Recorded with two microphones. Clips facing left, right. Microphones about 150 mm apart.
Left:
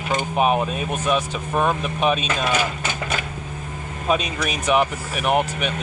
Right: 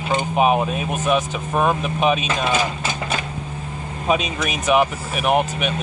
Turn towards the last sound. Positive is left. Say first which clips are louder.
# right 2 dB
turn(degrees=-10)  # may be behind; listen again after turning